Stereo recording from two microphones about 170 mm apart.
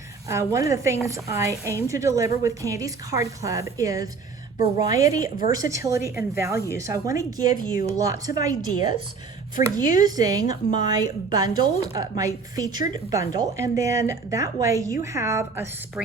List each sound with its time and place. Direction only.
0.3 s a woman's voice: 15° right (ahead or behind)